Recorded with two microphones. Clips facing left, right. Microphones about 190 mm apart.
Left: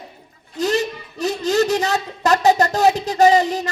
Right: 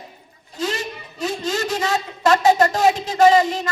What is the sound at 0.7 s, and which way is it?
Speech, 65° left (ahead or behind).